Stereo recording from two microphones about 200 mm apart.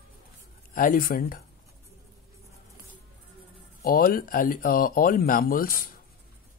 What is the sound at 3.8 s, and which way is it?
Speech, 45° left (ahead or behind).